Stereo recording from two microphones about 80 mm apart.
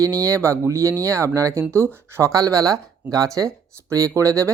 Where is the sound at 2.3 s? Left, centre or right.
Right.